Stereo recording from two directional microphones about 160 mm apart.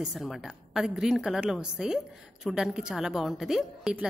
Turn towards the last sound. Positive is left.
turn(degrees=-5)  # may be behind; listen again after turning